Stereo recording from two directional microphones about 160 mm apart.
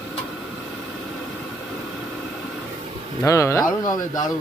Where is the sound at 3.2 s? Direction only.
20° left (ahead or behind).